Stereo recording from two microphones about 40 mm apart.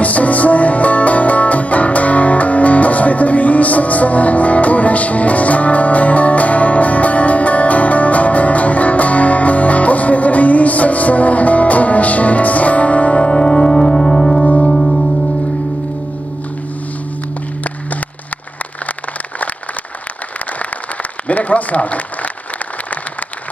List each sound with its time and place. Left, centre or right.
0.0 s music: left; by 15.0 s centre
21.3 s applause: left